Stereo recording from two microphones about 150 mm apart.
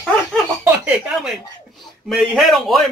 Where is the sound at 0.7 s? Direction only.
10° right (ahead or behind).